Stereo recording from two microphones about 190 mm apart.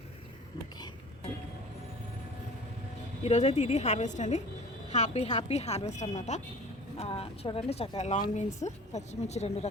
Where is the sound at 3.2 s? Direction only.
35° left (ahead or behind).